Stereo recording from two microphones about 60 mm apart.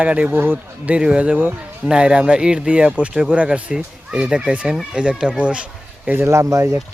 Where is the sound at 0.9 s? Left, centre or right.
Centre.